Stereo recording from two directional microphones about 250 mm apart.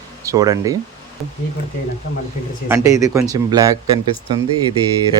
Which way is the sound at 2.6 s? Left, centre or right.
Centre.